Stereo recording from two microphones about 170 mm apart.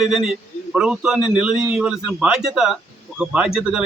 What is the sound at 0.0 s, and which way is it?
A man's voice, centre (ahead or behind).